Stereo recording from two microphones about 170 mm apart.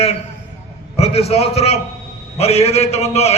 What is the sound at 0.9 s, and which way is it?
A man's voice, 35° left (ahead or behind).